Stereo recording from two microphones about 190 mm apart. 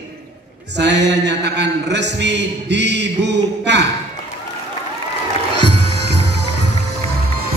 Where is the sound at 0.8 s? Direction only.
65° right (ahead or behind).